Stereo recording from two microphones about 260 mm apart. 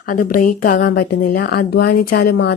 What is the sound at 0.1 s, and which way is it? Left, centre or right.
A woman's voice, left.